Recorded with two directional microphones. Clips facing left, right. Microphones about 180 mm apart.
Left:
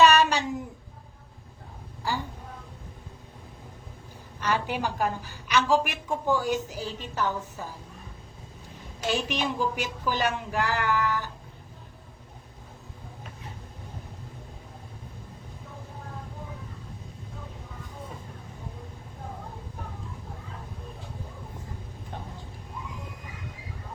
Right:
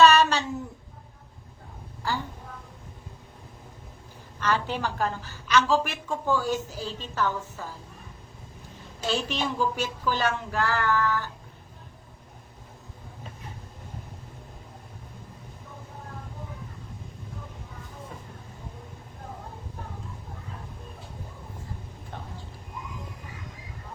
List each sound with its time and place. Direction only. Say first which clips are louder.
0.0 s a sound: right 1 dB; 15° left (ahead or behind)
4.4 s a woman's voice: right 1 dB; 15° left (ahead or behind)
9.0 s a woman's voice: even; 15° left (ahead or behind)